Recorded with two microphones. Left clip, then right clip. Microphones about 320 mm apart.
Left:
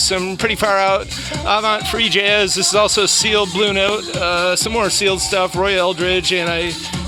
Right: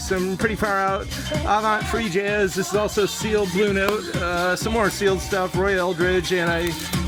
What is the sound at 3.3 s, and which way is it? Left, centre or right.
Speech, centre.